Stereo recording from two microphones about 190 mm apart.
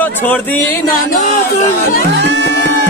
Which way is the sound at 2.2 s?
65° right (ahead or behind).